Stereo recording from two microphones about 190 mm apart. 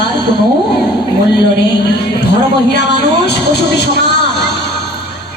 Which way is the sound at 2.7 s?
60° left (ahead or behind).